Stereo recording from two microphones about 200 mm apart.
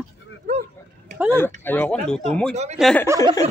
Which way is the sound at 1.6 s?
10° left (ahead or behind).